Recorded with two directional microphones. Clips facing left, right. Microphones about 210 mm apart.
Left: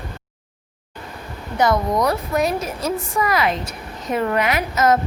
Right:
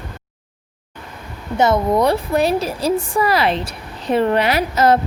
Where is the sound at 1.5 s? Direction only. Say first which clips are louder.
Right 3 dB; 25° right (ahead or behind).